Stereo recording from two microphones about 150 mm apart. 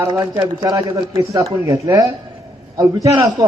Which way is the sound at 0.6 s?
25° right (ahead or behind).